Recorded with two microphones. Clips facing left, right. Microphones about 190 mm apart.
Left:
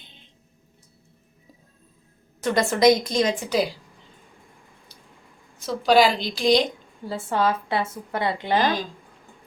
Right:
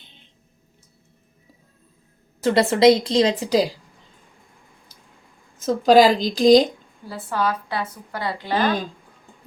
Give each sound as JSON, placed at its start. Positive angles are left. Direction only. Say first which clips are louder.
{"t": 2.4, "sound": "a woman's voice", "louder": "right 3 dB", "side_deg": -30}
{"t": 5.5, "sound": "a woman's voice", "louder": "right 4 dB", "side_deg": -45}
{"t": 7.1, "sound": "a woman's voice", "louder": "left 1 dB", "side_deg": 25}